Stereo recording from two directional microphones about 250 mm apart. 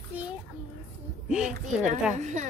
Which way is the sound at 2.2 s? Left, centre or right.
Right.